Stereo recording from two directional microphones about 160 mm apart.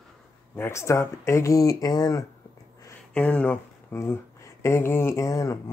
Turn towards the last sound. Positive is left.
turn(degrees=20)  # may be behind; listen again after turning